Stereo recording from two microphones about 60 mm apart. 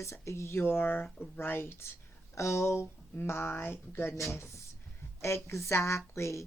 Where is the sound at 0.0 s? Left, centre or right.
Left.